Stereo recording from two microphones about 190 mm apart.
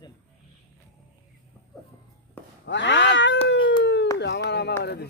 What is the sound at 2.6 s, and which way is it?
Cat, 70° left (ahead or behind).